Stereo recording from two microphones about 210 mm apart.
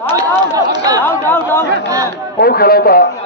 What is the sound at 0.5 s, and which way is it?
Speech, 15° right (ahead or behind).